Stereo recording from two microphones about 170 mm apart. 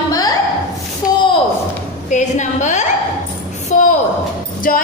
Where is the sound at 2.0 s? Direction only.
45° left (ahead or behind).